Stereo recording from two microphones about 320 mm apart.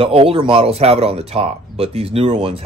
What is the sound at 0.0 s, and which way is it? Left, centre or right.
Speech, centre.